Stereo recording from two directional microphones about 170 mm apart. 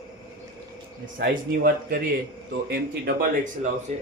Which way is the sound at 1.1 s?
55° right (ahead or behind).